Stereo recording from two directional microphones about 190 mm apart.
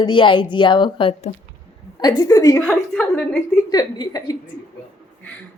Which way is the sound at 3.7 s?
20° left (ahead or behind).